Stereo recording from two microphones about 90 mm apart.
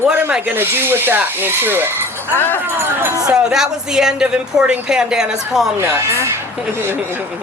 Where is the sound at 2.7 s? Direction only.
25° right (ahead or behind).